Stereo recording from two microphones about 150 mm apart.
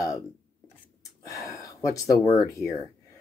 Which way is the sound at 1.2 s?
20° left (ahead or behind).